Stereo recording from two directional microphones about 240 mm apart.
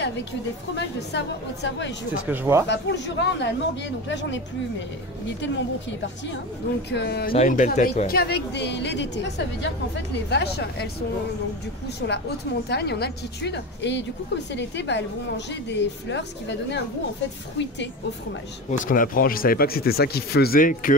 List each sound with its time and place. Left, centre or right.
0.7 s a woman's voice: left
2.2 s speech: centre
2.7 s a woman's voice: left
5.4 s a woman's voice: left
7.3 s a woman's voice: left
12.0 s a woman's voice: left
18.7 s speech: left